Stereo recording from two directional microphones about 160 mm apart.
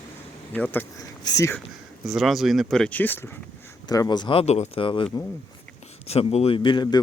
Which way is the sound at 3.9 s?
25° left (ahead or behind).